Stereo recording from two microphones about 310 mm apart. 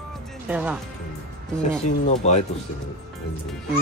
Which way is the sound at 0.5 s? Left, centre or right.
Centre.